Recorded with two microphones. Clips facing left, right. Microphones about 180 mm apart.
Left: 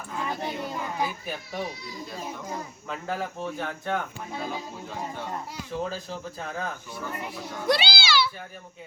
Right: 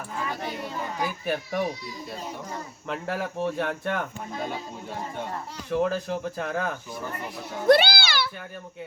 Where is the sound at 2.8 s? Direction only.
65° right (ahead or behind).